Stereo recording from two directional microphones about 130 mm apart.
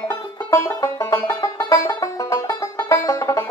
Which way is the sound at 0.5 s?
20° left (ahead or behind).